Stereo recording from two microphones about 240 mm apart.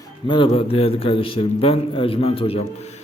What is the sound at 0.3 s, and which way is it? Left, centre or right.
Speech, left.